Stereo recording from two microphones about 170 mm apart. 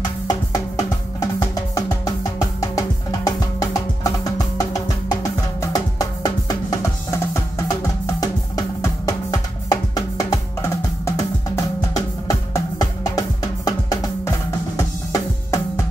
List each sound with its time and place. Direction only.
0.3 s music: 20° left (ahead or behind)
14.8 s drum: 15° left (ahead or behind)